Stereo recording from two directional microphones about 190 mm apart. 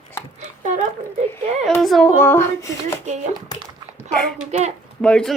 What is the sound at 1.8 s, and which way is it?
Speech, centre (ahead or behind).